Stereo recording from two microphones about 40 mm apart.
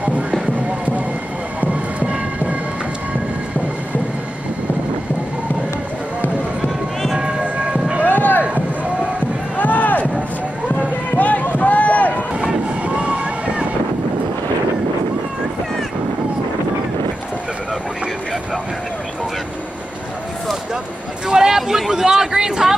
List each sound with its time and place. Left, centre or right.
1.6 s a sound: right
7.2 s music: right
8.0 s rowboat: left
9.6 s run: left
11.1 s run: left
12.4 s vehicle: right
21.3 s a sound: centre